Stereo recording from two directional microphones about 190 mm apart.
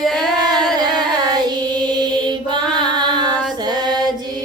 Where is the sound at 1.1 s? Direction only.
20° right (ahead or behind).